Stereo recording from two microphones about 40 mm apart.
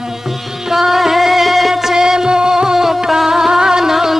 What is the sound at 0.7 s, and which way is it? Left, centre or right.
Music, centre.